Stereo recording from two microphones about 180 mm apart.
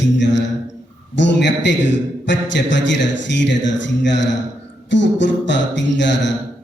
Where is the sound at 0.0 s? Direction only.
80° left.